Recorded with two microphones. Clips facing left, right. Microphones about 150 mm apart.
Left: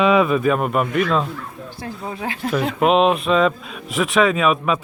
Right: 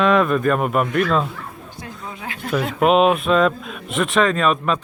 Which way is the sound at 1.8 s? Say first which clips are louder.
Left 6 dB; 35° left (ahead or behind).